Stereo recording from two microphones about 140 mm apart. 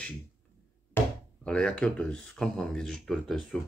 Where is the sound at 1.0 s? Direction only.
15° left (ahead or behind).